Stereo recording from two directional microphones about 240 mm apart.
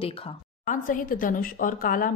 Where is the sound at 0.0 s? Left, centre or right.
Left.